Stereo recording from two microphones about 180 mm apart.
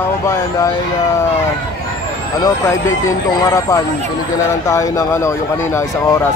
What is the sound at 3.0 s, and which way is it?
Speech, 15° left (ahead or behind).